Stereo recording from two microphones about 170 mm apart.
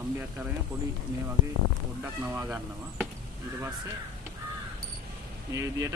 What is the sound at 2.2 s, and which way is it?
Speech, 10° right (ahead or behind).